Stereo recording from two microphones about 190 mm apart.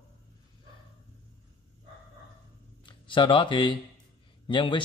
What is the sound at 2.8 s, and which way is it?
A man's voice, 25° left (ahead or behind).